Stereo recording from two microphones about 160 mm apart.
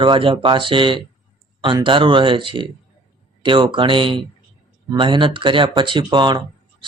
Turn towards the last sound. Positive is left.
turn(degrees=-30)  # may be behind; listen again after turning